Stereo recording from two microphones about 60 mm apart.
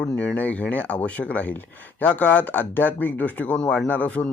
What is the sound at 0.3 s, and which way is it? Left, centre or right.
Speech, left.